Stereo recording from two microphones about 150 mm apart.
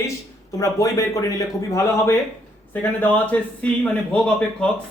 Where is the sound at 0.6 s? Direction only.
20° left (ahead or behind).